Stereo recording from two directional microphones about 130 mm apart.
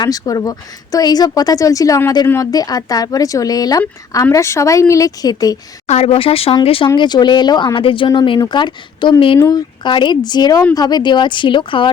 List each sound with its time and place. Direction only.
0.0 s a woman's voice: 30° left (ahead or behind)
5.9 s speech: 50° left (ahead or behind)
9.4 s speech: 30° left (ahead or behind)